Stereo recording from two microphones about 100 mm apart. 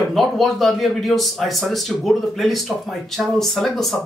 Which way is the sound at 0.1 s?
Centre (ahead or behind).